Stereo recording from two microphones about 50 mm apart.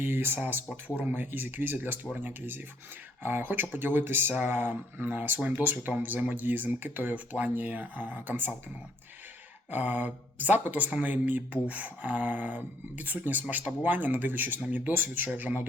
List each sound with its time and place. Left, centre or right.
0.0 s speech: right
3.2 s speech: right
9.7 s speech: right